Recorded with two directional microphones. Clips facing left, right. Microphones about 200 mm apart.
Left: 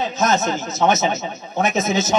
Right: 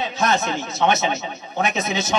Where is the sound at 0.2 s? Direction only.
40° left (ahead or behind).